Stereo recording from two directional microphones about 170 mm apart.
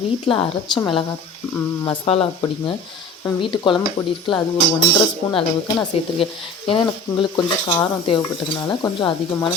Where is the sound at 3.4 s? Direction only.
30° left (ahead or behind).